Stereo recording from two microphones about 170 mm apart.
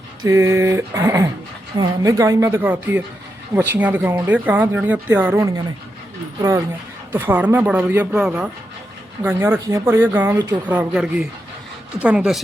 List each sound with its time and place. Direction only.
0.2 s speech: 15° right (ahead or behind)
7.1 s speech: 10° right (ahead or behind)